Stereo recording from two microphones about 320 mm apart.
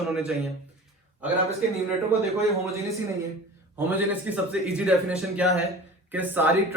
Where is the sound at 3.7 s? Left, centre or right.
Centre.